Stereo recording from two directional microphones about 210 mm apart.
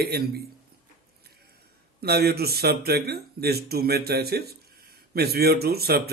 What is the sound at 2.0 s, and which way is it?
Speech, 50° right (ahead or behind).